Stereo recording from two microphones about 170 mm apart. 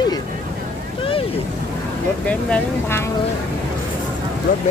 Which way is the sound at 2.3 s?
10° left (ahead or behind).